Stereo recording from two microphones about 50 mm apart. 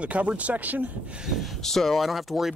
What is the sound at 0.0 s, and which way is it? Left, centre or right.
Speech, right.